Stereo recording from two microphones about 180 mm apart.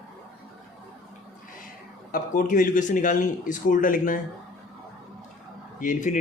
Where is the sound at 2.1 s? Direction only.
50° left (ahead or behind).